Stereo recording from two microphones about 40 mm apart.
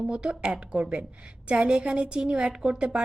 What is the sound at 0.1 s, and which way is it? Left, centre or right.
A woman's voice, right.